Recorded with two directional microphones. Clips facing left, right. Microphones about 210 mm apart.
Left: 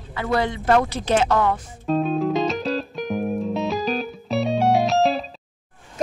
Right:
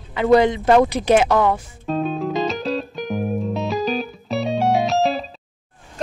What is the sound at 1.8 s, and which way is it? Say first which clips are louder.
Music: left 2 dB; centre (ahead or behind).